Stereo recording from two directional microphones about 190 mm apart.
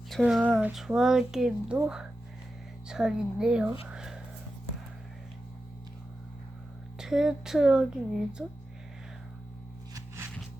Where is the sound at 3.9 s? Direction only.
5° right (ahead or behind).